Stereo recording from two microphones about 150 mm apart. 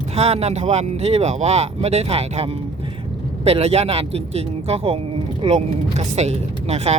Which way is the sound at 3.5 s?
40° right (ahead or behind).